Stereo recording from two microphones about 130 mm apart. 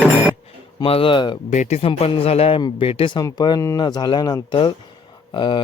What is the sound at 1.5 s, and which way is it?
Speech, 60° left (ahead or behind).